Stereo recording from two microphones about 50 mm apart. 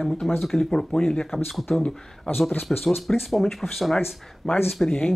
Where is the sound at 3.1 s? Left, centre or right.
Centre.